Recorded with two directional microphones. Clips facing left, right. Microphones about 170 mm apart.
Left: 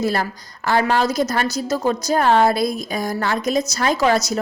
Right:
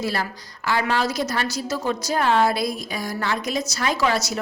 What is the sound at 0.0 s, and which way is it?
A woman's voice, 45° left (ahead or behind).